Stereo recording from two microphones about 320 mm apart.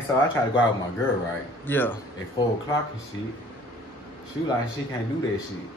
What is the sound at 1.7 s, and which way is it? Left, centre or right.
Speech, centre.